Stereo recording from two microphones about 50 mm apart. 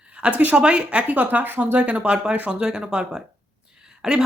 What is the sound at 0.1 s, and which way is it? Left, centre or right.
Speech, right.